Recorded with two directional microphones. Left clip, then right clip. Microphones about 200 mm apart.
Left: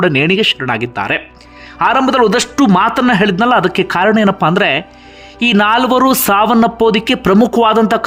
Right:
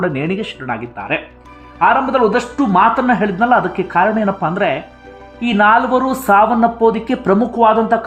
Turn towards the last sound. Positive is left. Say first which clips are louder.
# left 1 dB
turn(degrees=30)  # may be behind; listen again after turning